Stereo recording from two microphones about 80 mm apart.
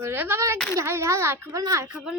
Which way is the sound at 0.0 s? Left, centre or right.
Right.